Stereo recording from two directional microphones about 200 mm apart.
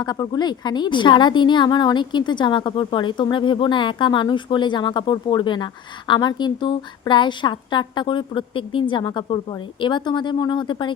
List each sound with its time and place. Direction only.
0.0 s a woman's voice: 20° left (ahead or behind)